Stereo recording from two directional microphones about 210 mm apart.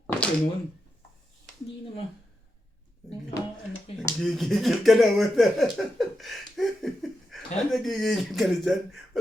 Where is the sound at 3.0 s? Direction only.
Centre (ahead or behind).